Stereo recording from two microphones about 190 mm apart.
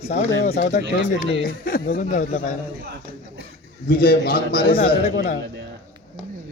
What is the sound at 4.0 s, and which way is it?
Speech, 50° left (ahead or behind).